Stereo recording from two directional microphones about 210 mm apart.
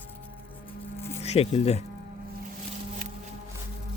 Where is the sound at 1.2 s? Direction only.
30° left (ahead or behind).